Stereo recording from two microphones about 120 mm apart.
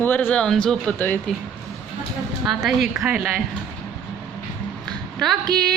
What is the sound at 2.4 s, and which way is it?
Speech, centre (ahead or behind).